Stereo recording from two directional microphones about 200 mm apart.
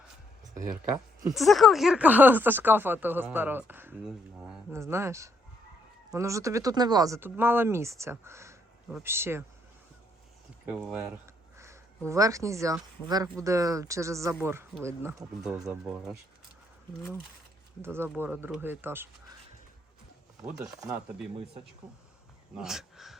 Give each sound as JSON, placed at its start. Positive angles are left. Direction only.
{"t": 1.3, "sound": "speech", "side_deg": 0}
{"t": 10.7, "sound": "speech", "side_deg": -5}
{"t": 15.2, "sound": "speech", "side_deg": -5}
{"t": 17.8, "sound": "speech", "side_deg": -10}
{"t": 20.4, "sound": "speech", "side_deg": -10}
{"t": 22.5, "sound": "speech", "side_deg": 0}